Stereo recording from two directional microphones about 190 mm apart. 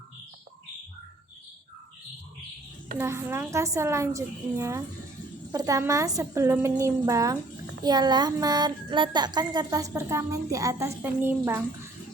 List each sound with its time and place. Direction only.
3.0 s a woman's voice: 15° right (ahead or behind)